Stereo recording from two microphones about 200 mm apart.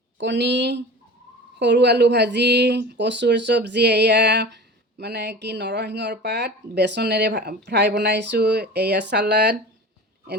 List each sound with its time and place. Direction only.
0.2 s speech: 60° right (ahead or behind)